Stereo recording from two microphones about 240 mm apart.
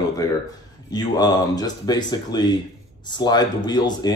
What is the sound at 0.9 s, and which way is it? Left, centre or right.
Speech, centre.